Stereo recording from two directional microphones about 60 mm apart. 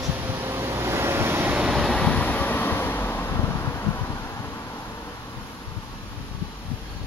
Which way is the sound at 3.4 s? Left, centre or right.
Left.